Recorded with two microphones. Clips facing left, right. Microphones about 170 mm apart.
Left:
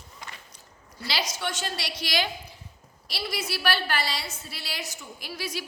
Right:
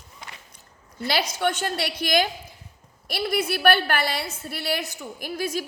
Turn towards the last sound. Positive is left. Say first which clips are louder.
# right 7 dB
turn(degrees=-50)  # may be behind; listen again after turning